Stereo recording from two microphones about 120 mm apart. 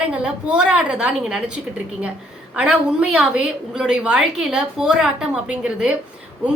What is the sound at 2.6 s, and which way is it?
A woman's voice, 5° right (ahead or behind).